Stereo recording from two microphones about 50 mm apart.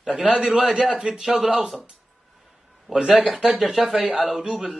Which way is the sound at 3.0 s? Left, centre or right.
Centre.